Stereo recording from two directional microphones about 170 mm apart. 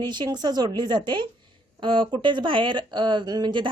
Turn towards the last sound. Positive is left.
turn(degrees=-30)  # may be behind; listen again after turning